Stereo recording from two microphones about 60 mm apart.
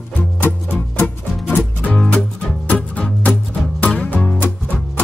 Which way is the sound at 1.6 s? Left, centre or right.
Left.